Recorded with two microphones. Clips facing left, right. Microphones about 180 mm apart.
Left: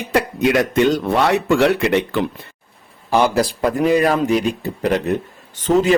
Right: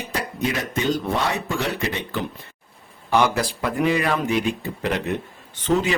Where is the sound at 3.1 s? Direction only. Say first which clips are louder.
Left 4 dB; 35° left (ahead or behind).